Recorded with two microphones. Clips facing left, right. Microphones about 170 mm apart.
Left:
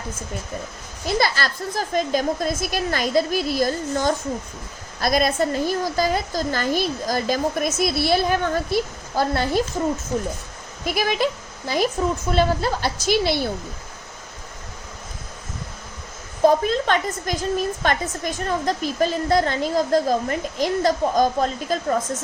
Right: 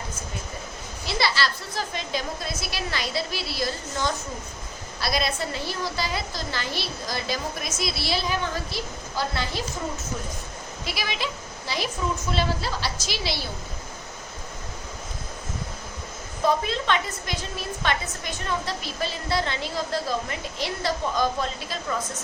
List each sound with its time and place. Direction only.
1.0 s a woman's voice: 45° left (ahead or behind)
10.8 s a woman's voice: 50° left (ahead or behind)
16.4 s a woman's voice: 45° left (ahead or behind)